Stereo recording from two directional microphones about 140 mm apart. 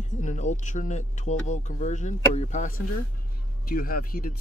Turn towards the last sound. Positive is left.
turn(degrees=90)